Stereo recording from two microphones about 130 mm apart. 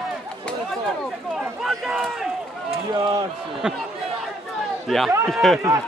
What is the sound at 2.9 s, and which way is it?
Run, 35° right (ahead or behind).